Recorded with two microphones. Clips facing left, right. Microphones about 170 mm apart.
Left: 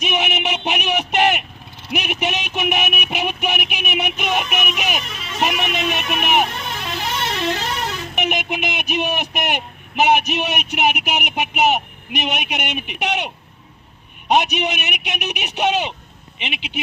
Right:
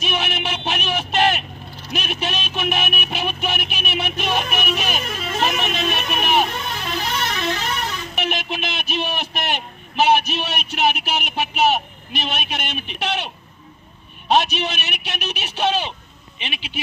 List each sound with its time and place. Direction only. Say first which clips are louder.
0.0 s a man's voice: left 3 dB; 20° left (ahead or behind)
5.0 s speech: right 5 dB; 50° right (ahead or behind)
5.4 s a man's voice: left 2 dB; 15° left (ahead or behind)
7.2 s music: left 2 dB; 25° left (ahead or behind)
8.1 s a man's voice: left 3 dB; 20° left (ahead or behind)